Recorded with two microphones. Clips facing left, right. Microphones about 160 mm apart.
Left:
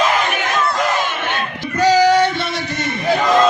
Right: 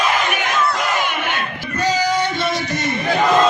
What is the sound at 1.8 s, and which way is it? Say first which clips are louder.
Female singing: left 7 dB; 75° left (ahead or behind).